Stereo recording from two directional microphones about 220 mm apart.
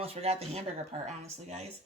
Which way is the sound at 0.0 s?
25° right (ahead or behind).